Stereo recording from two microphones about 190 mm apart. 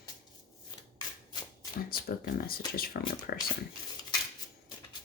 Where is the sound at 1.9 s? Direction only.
50° left (ahead or behind).